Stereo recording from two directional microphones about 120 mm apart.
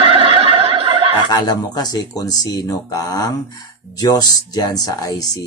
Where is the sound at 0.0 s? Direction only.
45° right (ahead or behind).